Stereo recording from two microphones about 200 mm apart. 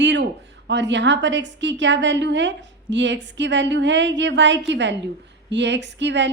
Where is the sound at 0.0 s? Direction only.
60° right (ahead or behind).